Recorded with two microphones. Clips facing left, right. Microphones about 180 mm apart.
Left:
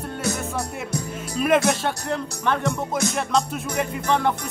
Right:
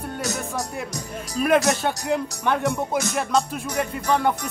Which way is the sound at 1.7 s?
5° right (ahead or behind).